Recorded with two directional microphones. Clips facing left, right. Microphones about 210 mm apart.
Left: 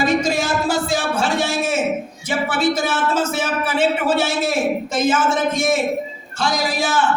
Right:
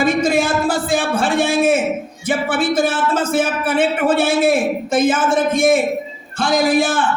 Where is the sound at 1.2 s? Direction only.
55° right (ahead or behind).